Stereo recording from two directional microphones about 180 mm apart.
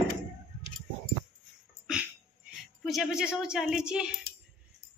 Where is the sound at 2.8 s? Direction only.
Centre (ahead or behind).